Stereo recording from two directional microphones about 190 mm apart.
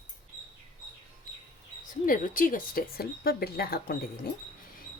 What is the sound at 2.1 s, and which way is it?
Speech, 45° left (ahead or behind).